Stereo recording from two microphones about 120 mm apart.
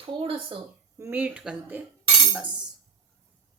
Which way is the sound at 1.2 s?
10° right (ahead or behind).